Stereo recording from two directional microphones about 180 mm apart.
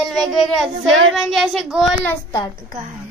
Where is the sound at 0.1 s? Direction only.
Centre (ahead or behind).